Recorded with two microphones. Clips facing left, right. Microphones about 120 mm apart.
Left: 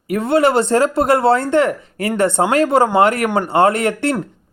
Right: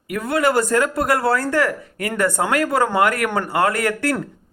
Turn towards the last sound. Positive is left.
turn(degrees=25)  # may be behind; listen again after turning